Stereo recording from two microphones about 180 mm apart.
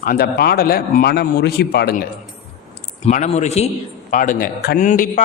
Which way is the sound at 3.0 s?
40° left (ahead or behind).